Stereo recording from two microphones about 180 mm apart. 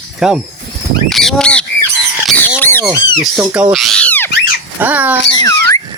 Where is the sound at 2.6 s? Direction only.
10° left (ahead or behind).